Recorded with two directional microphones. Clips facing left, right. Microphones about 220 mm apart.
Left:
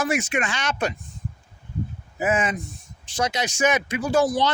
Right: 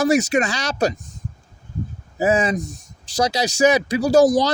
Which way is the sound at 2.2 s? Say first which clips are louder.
Right 5 dB; 40° right (ahead or behind).